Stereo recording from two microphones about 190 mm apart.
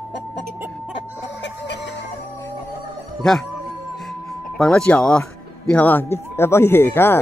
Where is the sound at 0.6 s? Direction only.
10° right (ahead or behind).